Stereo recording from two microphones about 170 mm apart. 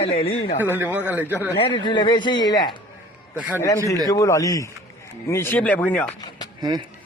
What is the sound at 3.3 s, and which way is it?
Speech, 10° right (ahead or behind).